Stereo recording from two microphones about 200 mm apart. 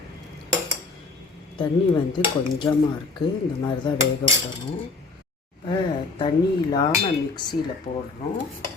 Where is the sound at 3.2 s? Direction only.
25° left (ahead or behind).